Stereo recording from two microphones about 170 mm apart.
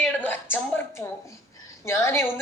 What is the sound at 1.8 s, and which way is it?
Speech, 15° left (ahead or behind).